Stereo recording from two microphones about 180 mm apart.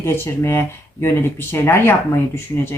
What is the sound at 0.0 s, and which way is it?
Speech, 10° left (ahead or behind).